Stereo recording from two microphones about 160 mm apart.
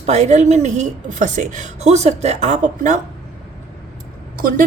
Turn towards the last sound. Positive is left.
turn(degrees=-60)  # may be behind; listen again after turning